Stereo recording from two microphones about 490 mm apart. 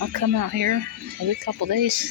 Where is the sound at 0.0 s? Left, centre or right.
Right.